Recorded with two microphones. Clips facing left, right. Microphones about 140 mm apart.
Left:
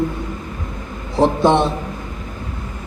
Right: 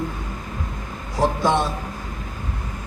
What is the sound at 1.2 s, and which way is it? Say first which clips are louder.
Speech: left 6 dB; 25° left (ahead or behind).